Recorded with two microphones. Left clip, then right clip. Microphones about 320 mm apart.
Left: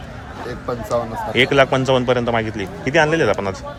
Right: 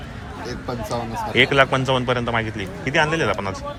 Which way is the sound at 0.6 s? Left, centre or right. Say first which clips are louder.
Left 6 dB; centre.